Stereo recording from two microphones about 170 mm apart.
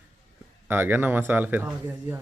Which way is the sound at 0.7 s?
10° right (ahead or behind).